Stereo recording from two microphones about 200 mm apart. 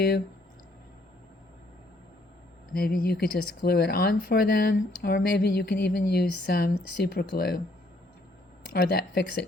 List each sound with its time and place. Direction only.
2.7 s speech: 50° left (ahead or behind)
8.7 s speech: 50° left (ahead or behind)